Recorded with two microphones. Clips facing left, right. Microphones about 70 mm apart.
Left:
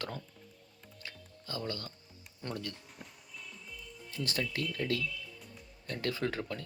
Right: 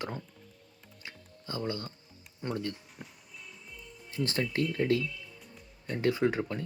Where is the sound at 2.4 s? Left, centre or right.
Centre.